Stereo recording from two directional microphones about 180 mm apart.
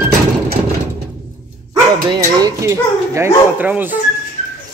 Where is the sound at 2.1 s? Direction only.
20° right (ahead or behind).